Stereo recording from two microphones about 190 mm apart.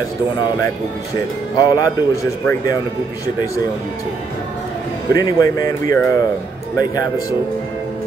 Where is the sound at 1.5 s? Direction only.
20° left (ahead or behind).